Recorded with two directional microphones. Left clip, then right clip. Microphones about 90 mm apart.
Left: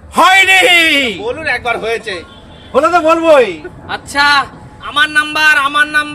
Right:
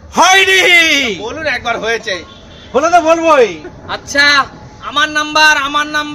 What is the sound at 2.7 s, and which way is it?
A man's voice, 25° right (ahead or behind).